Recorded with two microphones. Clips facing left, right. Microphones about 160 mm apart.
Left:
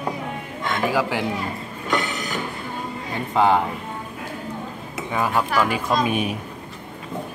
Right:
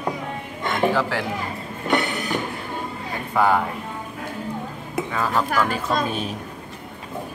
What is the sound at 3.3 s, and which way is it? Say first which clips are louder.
Speech: left 1 dB; 25° left (ahead or behind).